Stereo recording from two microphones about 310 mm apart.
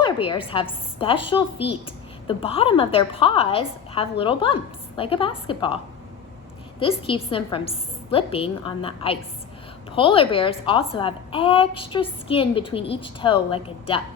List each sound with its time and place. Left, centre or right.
0.0 s a woman's voice: centre
2.2 s a woman's voice: centre
6.7 s a woman's voice: centre